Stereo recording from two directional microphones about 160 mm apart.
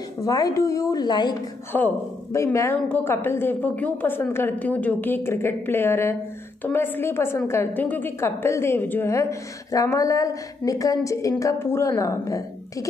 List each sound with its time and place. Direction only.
0.2 s a woman's voice: 20° left (ahead or behind)
1.7 s a woman's voice: 10° left (ahead or behind)